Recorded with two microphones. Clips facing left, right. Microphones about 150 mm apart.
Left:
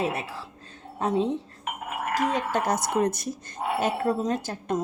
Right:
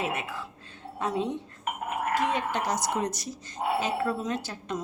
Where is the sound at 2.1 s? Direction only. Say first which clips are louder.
Left 4 dB; 40° left (ahead or behind).